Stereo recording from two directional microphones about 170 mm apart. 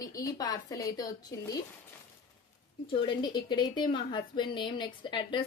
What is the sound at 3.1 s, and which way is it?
A woman's voice, 25° left (ahead or behind).